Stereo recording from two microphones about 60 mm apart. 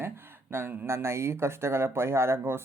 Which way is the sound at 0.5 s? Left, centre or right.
Right.